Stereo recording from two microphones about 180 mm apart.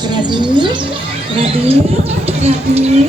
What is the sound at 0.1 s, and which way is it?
Bird, 25° right (ahead or behind).